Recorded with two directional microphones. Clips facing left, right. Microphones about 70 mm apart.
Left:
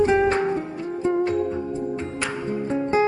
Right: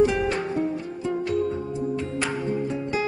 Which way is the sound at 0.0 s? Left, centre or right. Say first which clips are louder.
Left 3 dB; left.